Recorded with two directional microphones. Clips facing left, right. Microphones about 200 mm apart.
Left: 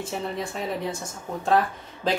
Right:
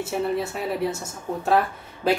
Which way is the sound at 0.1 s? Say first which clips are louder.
Right 5 dB; 5° right (ahead or behind).